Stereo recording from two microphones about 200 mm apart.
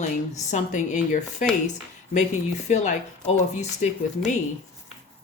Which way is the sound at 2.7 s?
35° left (ahead or behind).